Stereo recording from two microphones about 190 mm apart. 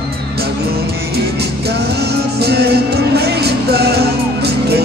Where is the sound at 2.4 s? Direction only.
60° right (ahead or behind).